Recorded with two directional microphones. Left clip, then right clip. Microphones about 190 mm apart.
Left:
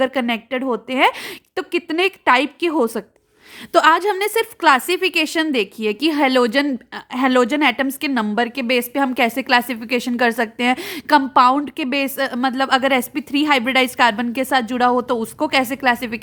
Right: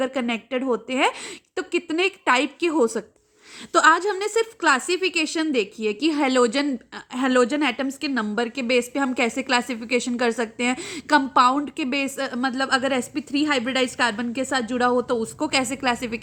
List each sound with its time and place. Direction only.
0.0 s a woman's voice: 30° left (ahead or behind)